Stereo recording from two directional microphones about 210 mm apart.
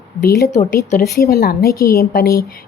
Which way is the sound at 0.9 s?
45° left (ahead or behind).